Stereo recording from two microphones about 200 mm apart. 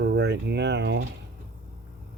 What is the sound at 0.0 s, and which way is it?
Speech, 55° right (ahead or behind).